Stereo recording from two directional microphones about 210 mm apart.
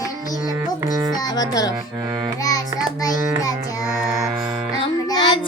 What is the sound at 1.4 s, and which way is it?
Speech, 20° left (ahead or behind).